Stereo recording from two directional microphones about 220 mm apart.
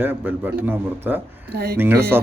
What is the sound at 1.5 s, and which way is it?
Speech, 45° right (ahead or behind).